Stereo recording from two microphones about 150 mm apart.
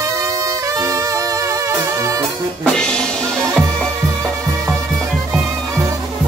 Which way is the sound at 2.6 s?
5° left (ahead or behind).